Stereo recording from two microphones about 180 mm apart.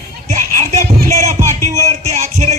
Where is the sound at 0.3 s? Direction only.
40° right (ahead or behind).